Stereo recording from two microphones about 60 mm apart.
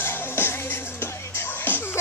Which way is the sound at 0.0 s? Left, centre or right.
Left.